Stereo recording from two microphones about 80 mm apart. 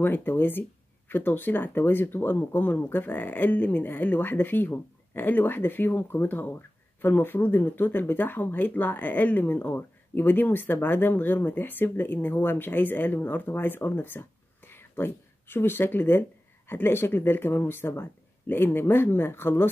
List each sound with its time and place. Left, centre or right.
0.0 s speech: left